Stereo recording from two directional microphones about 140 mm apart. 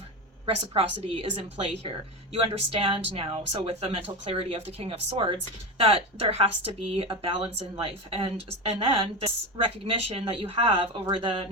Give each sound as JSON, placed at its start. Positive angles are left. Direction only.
{"t": 0.4, "sound": "a woman's voice", "side_deg": -45}